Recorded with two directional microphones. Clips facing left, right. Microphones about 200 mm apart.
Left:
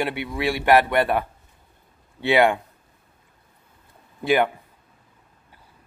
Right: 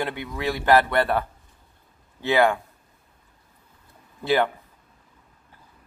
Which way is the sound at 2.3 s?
15° left (ahead or behind).